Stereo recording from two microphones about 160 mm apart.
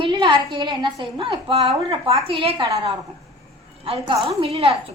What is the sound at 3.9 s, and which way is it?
Speech, 35° right (ahead or behind).